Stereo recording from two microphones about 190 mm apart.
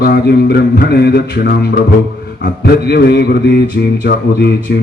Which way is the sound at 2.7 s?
55° left (ahead or behind).